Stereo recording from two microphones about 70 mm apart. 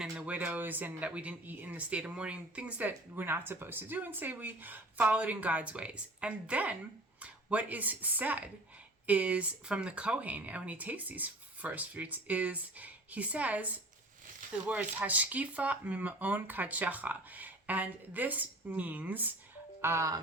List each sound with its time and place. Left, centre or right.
0.3 s speech: right
19.8 s speech: right